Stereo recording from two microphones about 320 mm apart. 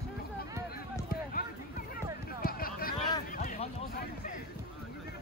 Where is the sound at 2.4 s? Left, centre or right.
Left.